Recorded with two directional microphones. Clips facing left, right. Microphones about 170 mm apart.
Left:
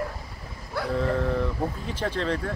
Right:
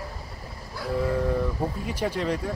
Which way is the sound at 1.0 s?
10° right (ahead or behind).